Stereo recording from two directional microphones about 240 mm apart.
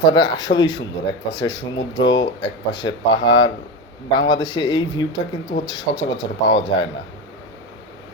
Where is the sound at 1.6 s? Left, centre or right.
Left.